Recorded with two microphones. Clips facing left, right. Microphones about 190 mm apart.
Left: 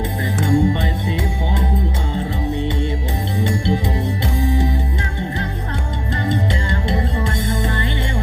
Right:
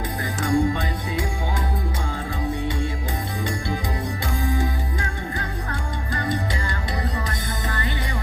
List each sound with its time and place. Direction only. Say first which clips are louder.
0.4 s music: left 4 dB; 25° left (ahead or behind)
6.8 s music: left 8 dB; 25° left (ahead or behind)